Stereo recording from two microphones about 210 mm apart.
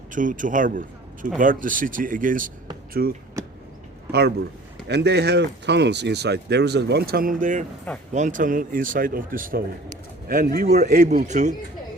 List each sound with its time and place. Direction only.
0.1 s a man's voice: 40° right (ahead or behind)
3.4 s a sound: 15° right (ahead or behind)
4.9 s speech: 55° right (ahead or behind); by 11.5 s 35° right (ahead or behind)